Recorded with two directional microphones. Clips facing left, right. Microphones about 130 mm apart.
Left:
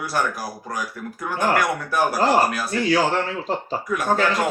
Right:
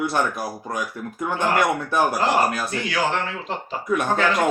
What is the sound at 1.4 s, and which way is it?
Speech, 25° right (ahead or behind).